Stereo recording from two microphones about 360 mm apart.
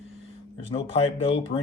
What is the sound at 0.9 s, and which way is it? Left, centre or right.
Dishes, centre.